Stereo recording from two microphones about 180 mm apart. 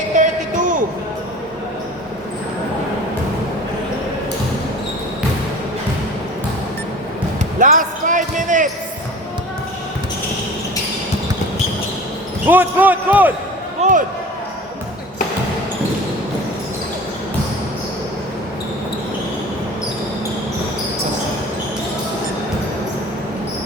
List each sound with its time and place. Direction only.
0.2 s music: 45° right (ahead or behind)
7.6 s basketball bounce: 45° right (ahead or behind)
12.5 s basketball bounce: 10° right (ahead or behind)
13.8 s basketball bounce: 35° right (ahead or behind)